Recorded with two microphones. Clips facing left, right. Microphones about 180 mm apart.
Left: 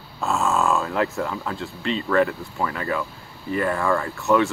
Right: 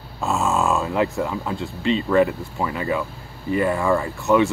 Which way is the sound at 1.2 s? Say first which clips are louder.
Right 2 dB; 10° right (ahead or behind).